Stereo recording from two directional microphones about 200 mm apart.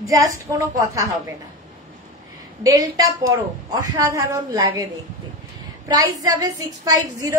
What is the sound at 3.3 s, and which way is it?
A woman's voice, 15° right (ahead or behind).